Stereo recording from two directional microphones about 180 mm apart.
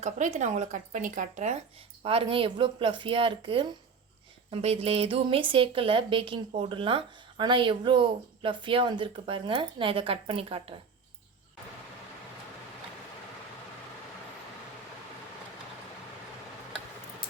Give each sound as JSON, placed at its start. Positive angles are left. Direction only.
{"t": 0.0, "sound": "speech", "side_deg": -40}
{"t": 2.0, "sound": "speech", "side_deg": -30}